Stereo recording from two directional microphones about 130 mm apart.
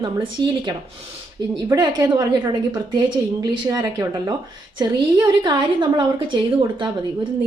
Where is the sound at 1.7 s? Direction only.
30° right (ahead or behind).